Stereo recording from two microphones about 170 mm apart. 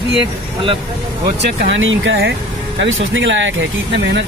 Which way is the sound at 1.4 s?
90° right.